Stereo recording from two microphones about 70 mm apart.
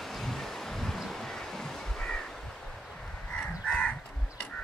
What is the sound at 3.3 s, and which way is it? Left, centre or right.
Crow, centre.